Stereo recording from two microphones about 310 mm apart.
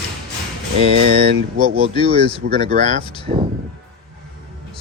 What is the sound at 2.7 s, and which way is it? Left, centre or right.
Speech, right.